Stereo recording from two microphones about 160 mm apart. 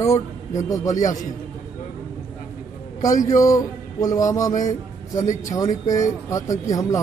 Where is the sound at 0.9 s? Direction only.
55° left (ahead or behind).